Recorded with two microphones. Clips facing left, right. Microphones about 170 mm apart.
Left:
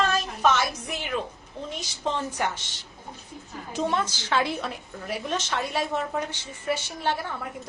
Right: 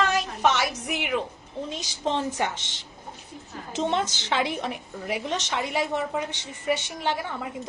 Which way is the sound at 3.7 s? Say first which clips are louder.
Right 1 dB; 20° right (ahead or behind).